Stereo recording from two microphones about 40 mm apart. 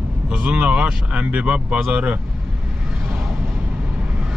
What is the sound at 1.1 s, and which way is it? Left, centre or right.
Speech, right.